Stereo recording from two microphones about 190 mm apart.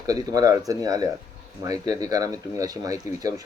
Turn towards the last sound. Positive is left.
turn(degrees=-20)  # may be behind; listen again after turning